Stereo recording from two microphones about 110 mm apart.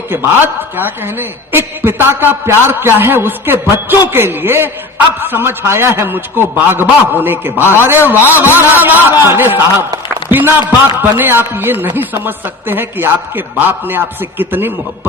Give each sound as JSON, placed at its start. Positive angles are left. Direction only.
{"t": 0.1, "sound": "a man's voice", "side_deg": -20}